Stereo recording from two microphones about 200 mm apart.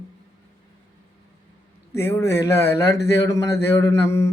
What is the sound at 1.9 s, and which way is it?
Speech, 10° left (ahead or behind).